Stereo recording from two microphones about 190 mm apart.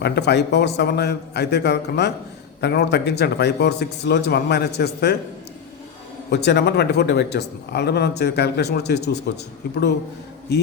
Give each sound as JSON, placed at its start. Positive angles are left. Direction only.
{"t": 0.0, "sound": "speech", "side_deg": 60}
{"t": 6.3, "sound": "speech", "side_deg": 60}